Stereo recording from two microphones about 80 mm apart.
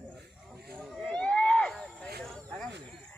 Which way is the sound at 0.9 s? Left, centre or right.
Centre.